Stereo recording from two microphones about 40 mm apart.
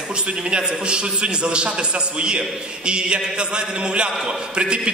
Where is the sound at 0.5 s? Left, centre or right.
Right.